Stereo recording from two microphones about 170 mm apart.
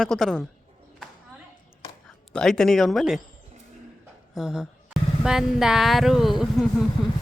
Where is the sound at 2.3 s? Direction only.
5° left (ahead or behind).